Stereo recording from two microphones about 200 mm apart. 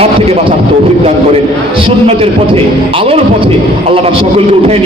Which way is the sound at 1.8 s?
30° right (ahead or behind).